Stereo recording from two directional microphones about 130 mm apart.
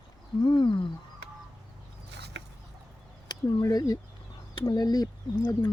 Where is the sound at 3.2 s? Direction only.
30° left (ahead or behind).